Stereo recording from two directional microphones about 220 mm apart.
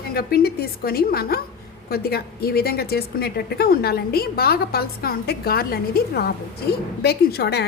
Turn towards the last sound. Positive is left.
turn(degrees=45)  # may be behind; listen again after turning